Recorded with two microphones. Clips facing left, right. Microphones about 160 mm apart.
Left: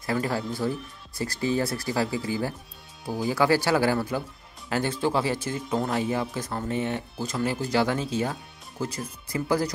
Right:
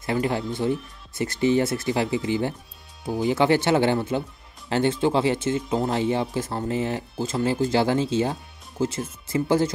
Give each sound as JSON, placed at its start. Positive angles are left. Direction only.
{"t": 0.0, "sound": "speech", "side_deg": -20}